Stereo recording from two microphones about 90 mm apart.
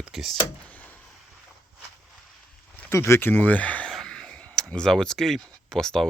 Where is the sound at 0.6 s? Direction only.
15° left (ahead or behind).